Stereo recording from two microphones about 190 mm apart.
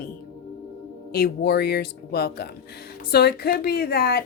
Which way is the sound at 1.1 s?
55° left (ahead or behind).